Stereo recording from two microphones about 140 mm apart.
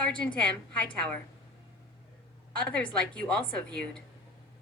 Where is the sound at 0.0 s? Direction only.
5° left (ahead or behind).